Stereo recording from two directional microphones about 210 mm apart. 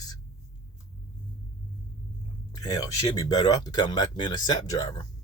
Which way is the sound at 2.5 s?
20° left (ahead or behind).